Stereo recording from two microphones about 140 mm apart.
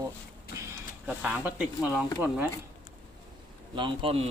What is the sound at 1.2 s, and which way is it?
Speech, 10° right (ahead or behind).